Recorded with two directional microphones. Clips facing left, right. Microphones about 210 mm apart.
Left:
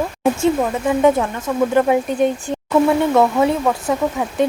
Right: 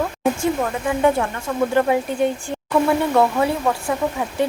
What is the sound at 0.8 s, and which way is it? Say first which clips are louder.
Speech: left 3 dB; 20° left (ahead or behind).